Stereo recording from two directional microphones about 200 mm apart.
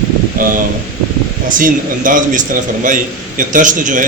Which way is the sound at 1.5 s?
40° right (ahead or behind).